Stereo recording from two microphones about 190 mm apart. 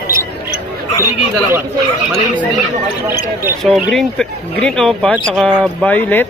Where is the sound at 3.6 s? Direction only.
Centre (ahead or behind).